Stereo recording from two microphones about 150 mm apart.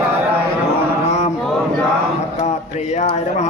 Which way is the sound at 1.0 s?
50° left (ahead or behind).